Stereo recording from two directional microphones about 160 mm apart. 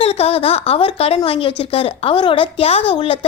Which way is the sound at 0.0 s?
40° left (ahead or behind).